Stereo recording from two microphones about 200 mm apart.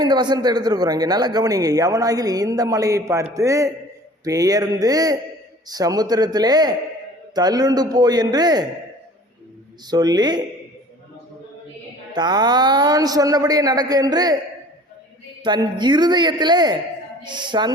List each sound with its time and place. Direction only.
0.0 s a man's voice: 20° right (ahead or behind)
9.8 s a man's voice: 20° right (ahead or behind)
12.1 s a man's voice: 20° right (ahead or behind)
15.4 s a man's voice: 20° right (ahead or behind)